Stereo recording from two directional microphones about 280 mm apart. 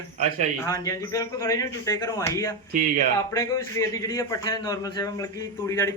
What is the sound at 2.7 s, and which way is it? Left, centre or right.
Speech, right.